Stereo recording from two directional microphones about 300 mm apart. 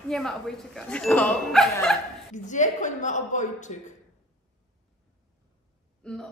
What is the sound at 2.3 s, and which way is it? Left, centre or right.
Speech, left.